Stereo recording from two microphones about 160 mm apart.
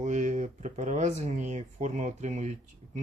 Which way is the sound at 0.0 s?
50° right (ahead or behind).